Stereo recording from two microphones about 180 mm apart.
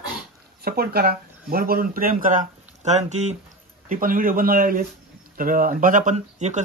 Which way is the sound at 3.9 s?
50° right (ahead or behind).